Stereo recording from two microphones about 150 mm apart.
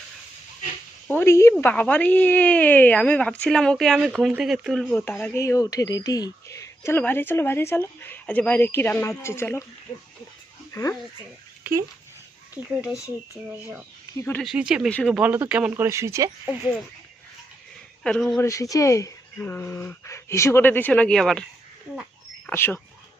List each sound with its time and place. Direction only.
1.0 s speech: 15° left (ahead or behind)
4.9 s speech: 15° left (ahead or behind)
10.7 s speech: 20° left (ahead or behind)
11.6 s speech: 20° right (ahead or behind)
13.5 s speech: 15° right (ahead or behind)
14.1 s speech: 20° left (ahead or behind)
14.4 s speech: 5° right (ahead or behind)
14.8 s speech: 5° left (ahead or behind)
15.1 s speech: 10° right (ahead or behind)
18.0 s speech: 5° left (ahead or behind)
18.4 s speech: 20° left (ahead or behind); by 21.4 s 5° left (ahead or behind)
22.4 s speech: 15° left (ahead or behind)